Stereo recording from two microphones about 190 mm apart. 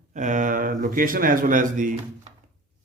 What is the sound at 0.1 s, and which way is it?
Speech, 40° right (ahead or behind).